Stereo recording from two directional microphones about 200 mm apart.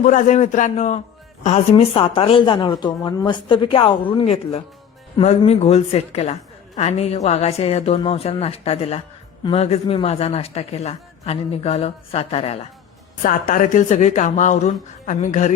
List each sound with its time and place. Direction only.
0.0 s a woman's voice: 40° left (ahead or behind)
13.2 s a woman's voice: 40° left (ahead or behind)